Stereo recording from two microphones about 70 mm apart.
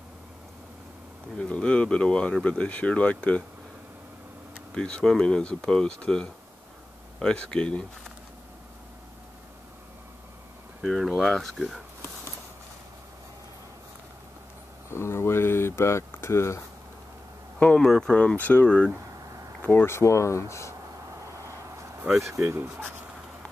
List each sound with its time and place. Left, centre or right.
1.4 s speech: centre
4.7 s speech: centre
10.8 s speech: centre
14.9 s speech: left
17.7 s speech: centre
18.1 s speech: left
18.9 s a sound: right
19.6 s speech: left
21.3 s vehicle: right
22.2 s speech: right